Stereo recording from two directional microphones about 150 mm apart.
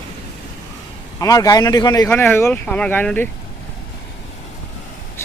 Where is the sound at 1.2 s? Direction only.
25° left (ahead or behind).